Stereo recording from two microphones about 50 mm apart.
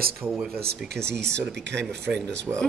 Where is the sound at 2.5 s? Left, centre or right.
Right.